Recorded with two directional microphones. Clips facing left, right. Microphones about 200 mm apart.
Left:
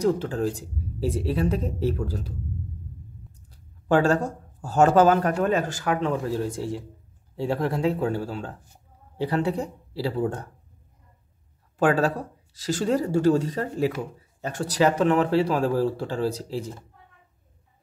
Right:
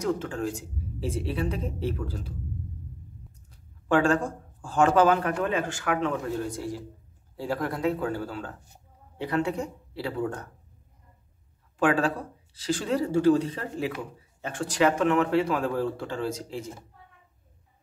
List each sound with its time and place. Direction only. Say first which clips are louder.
0.0 s a man's voice: left 5 dB; 35° left (ahead or behind)
3.3 s a man's voice: left 2 dB; 35° left (ahead or behind)
11.8 s a man's voice: left 2 dB; 40° left (ahead or behind)